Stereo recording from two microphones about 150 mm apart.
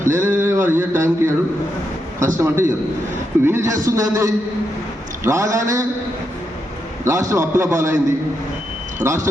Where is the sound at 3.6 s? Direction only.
20° right (ahead or behind).